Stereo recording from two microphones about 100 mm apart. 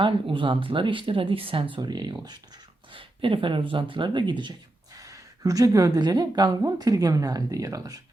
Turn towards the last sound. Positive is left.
turn(degrees=-35)  # may be behind; listen again after turning